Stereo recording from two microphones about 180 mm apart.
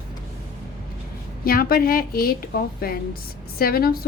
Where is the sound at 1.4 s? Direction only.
55° left (ahead or behind).